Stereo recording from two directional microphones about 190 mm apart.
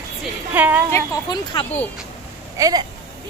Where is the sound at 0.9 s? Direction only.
25° left (ahead or behind).